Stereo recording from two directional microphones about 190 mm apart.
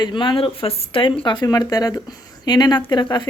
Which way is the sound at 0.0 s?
25° left (ahead or behind).